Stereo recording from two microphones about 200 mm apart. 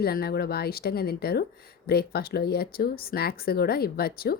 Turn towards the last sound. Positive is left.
turn(degrees=50)  # may be behind; listen again after turning